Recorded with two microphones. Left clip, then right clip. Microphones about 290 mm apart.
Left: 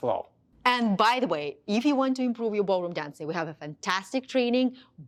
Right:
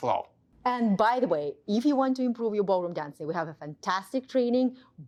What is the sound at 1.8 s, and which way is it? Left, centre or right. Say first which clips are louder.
A woman's voice: even; centre.